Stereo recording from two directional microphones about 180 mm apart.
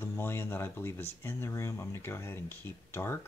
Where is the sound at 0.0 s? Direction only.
15° left (ahead or behind).